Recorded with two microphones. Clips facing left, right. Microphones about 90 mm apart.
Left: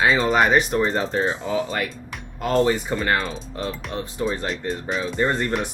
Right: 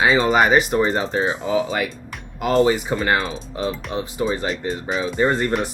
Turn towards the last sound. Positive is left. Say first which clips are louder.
# right 3 dB
turn(degrees=0)  # may be behind; listen again after turning